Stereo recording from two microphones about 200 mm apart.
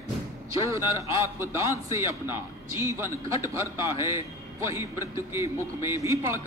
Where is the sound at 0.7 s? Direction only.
15° right (ahead or behind).